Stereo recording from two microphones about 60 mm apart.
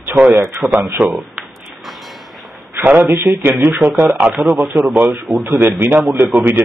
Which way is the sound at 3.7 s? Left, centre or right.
Right.